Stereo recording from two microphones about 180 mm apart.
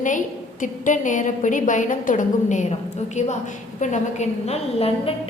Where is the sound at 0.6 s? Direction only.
45° left (ahead or behind).